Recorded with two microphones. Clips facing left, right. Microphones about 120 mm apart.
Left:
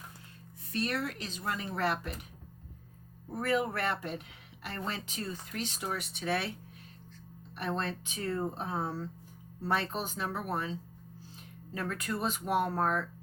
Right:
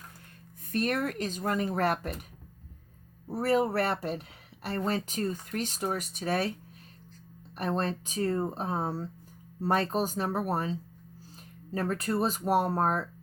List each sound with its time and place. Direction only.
0.7 s a woman's voice: 50° right (ahead or behind)
3.2 s speech: 35° right (ahead or behind)
7.5 s speech: 40° right (ahead or behind)